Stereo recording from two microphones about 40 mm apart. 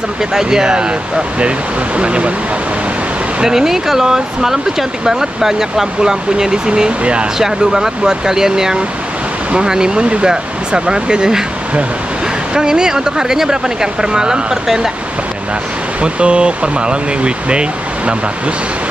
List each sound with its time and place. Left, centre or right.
0.3 s speech: centre
3.4 s speech: centre
7.3 s speech: centre
12.5 s speech: centre
16.0 s speech: right